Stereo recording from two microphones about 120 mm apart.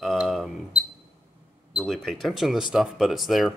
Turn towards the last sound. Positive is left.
turn(degrees=0)  # may be behind; listen again after turning